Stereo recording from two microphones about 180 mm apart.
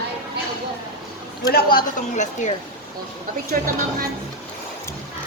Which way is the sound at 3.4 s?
50° right (ahead or behind).